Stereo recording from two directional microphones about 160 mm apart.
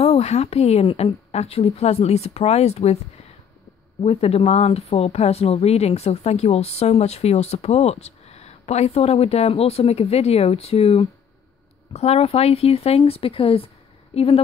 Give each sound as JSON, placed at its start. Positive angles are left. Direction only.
{"t": 0.0, "sound": "speech", "side_deg": 40}
{"t": 4.0, "sound": "speech", "side_deg": 40}